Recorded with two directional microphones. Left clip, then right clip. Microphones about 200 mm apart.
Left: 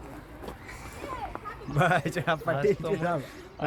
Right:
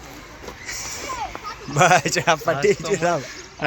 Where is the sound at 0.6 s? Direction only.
30° right (ahead or behind).